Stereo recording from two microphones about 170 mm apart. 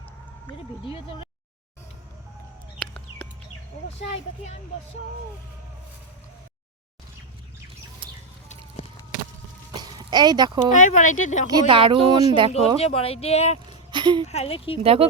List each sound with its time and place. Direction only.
2.7 s a sound: 5° left (ahead or behind)
9.7 s a sound: 25° right (ahead or behind)
10.8 s speech: 50° left (ahead or behind)
11.4 s speech: 25° right (ahead or behind)
12.5 s speech: 40° left (ahead or behind)
13.9 s speech: 25° right (ahead or behind)
14.3 s speech: 35° left (ahead or behind)
14.8 s speech: 35° right (ahead or behind)